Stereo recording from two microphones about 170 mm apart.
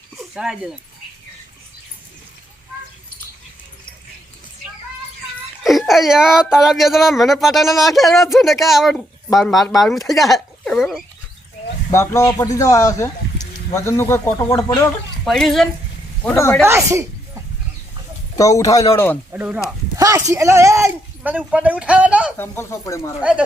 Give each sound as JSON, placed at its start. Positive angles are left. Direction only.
{"t": 0.3, "sound": "speech", "side_deg": -5}
{"t": 5.6, "sound": "speech", "side_deg": 0}
{"t": 11.9, "sound": "speech", "side_deg": 15}
{"t": 15.2, "sound": "speech", "side_deg": 0}
{"t": 16.2, "sound": "speech", "side_deg": 15}
{"t": 16.6, "sound": "speech", "side_deg": -15}
{"t": 18.3, "sound": "a man's voice", "side_deg": 20}
{"t": 19.3, "sound": "speech", "side_deg": -10}
{"t": 22.4, "sound": "speech", "side_deg": 15}